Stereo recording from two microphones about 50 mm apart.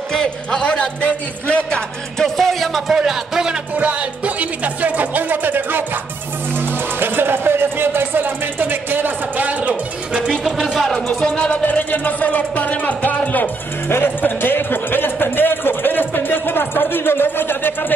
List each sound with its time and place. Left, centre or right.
0.1 s speech: centre
2.1 s music: centre
2.9 s music: centre
4.4 s speech: right
7.0 s speech: right
9.5 s speech: right
10.3 s speech: centre
11.1 s speech: centre
11.6 s speech: left
13.8 s a sound: left